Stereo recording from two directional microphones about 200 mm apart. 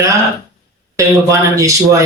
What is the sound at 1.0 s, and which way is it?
Speech, 15° right (ahead or behind).